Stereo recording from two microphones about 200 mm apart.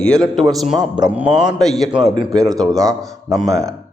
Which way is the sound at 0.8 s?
20° right (ahead or behind).